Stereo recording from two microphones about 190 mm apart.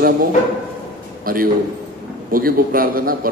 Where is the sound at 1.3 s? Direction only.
50° right (ahead or behind).